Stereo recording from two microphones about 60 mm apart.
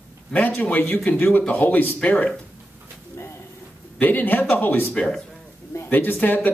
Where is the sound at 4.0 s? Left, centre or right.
Left.